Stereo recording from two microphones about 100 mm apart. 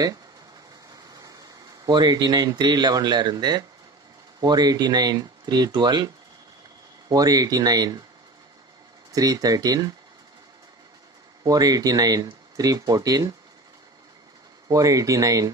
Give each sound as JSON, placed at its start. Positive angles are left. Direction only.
{"t": 1.9, "sound": "speech", "side_deg": -45}
{"t": 7.1, "sound": "speech", "side_deg": -40}
{"t": 9.1, "sound": "speech", "side_deg": -40}
{"t": 11.4, "sound": "speech", "side_deg": -40}
{"t": 14.7, "sound": "speech", "side_deg": -35}